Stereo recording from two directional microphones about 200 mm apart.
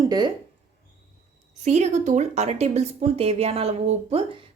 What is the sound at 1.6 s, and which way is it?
Speech, 35° right (ahead or behind).